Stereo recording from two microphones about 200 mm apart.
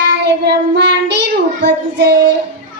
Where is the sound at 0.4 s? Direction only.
55° right (ahead or behind).